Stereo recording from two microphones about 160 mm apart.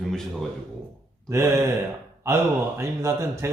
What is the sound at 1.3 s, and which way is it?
Speech, 15° right (ahead or behind).